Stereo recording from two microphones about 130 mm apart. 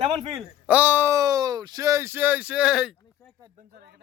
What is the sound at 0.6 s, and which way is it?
Speech, 10° right (ahead or behind).